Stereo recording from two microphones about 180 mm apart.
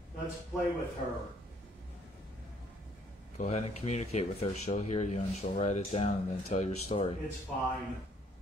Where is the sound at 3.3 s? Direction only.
35° left (ahead or behind).